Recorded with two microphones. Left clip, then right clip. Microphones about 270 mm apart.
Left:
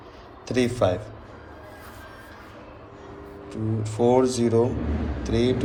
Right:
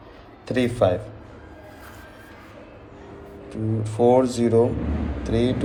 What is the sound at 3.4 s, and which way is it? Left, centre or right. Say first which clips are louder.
Speech: right 2 dB; centre.